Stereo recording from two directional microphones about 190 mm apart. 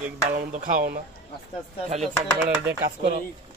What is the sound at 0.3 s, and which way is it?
Music, 45° right (ahead or behind).